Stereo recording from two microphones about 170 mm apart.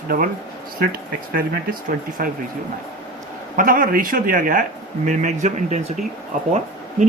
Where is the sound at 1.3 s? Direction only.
55° right (ahead or behind).